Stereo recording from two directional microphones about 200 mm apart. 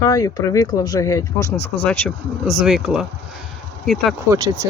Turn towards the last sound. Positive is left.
turn(degrees=-15)  # may be behind; listen again after turning